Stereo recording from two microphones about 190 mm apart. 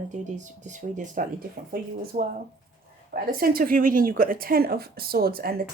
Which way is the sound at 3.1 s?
50° right (ahead or behind).